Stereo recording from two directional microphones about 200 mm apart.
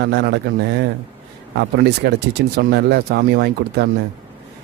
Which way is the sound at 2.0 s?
55° right (ahead or behind).